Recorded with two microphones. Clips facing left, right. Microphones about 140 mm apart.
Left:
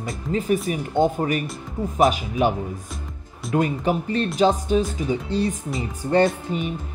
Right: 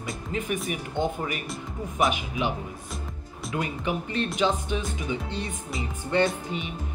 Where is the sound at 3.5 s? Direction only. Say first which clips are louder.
Left 8 dB; 40° left (ahead or behind).